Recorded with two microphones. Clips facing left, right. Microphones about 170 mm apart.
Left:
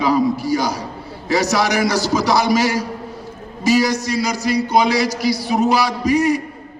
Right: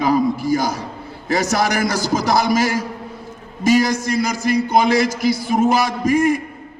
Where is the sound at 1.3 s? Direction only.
50° right (ahead or behind).